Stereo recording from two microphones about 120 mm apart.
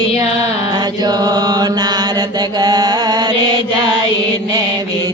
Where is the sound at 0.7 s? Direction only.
35° right (ahead or behind).